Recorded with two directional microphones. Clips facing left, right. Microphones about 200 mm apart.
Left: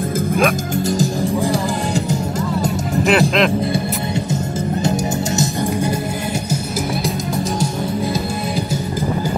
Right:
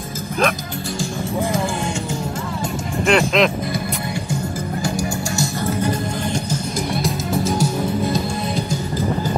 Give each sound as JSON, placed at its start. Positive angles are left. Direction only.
{"t": 3.1, "sound": "speech", "side_deg": 0}
{"t": 4.8, "sound": "music", "side_deg": 20}
{"t": 7.5, "sound": "music", "side_deg": -5}